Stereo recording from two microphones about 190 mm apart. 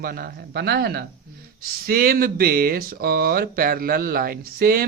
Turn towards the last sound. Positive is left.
turn(degrees=-50)  # may be behind; listen again after turning